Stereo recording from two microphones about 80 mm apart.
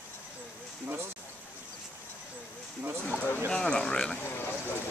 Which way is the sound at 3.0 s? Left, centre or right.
Left.